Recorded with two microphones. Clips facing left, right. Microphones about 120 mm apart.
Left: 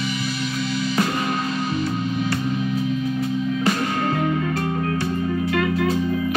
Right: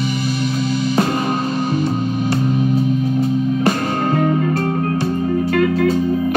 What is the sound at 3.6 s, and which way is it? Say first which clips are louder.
Music: right 4 dB; 40° right (ahead or behind).